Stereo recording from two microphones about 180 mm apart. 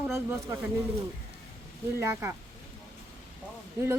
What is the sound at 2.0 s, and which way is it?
Speech, 15° right (ahead or behind).